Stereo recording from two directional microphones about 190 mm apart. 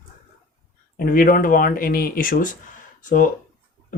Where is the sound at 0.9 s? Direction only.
50° left (ahead or behind).